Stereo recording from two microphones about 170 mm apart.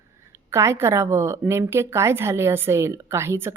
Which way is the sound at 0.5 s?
15° right (ahead or behind).